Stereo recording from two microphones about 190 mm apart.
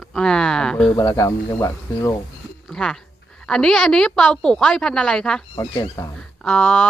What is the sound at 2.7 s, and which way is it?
Speech, 5° left (ahead or behind).